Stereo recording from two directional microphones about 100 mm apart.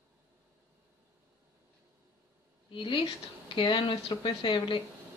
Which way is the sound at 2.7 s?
60° left (ahead or behind).